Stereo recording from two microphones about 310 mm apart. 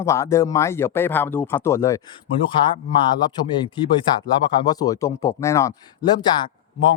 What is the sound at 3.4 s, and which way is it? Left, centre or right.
Speech, centre.